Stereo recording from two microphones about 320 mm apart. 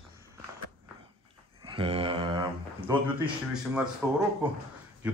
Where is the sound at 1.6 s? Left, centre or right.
Centre.